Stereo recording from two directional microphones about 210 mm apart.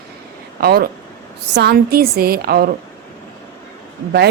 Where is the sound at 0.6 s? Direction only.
50° right (ahead or behind).